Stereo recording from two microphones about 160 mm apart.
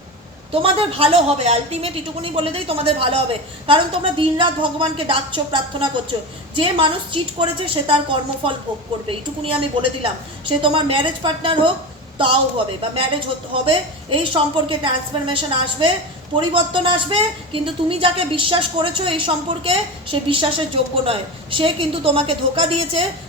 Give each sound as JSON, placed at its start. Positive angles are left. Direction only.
{"t": 0.5, "sound": "speech", "side_deg": -35}